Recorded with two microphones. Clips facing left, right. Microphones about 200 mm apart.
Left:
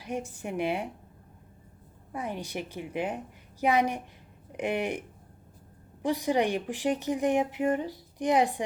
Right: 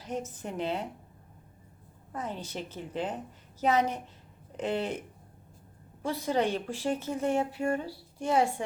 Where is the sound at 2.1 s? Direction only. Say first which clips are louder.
Left 2 dB; 10° left (ahead or behind).